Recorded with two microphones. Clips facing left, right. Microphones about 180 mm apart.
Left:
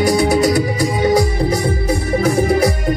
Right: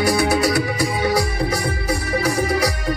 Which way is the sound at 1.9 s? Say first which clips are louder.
Left 4 dB; 50° left (ahead or behind).